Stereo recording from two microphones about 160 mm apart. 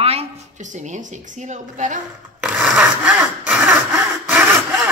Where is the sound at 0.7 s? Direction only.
50° right (ahead or behind).